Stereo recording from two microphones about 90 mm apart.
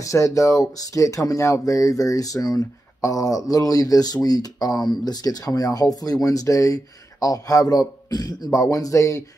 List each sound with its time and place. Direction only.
0.0 s speech: 35° left (ahead or behind)